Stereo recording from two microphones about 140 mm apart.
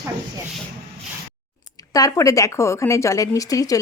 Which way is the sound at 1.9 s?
25° left (ahead or behind).